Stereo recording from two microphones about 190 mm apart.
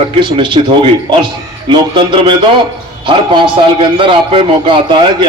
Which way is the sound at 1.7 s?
25° right (ahead or behind).